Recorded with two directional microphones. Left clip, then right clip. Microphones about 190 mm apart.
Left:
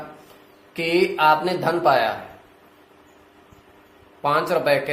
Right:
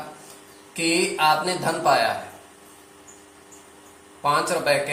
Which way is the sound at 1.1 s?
50° left (ahead or behind).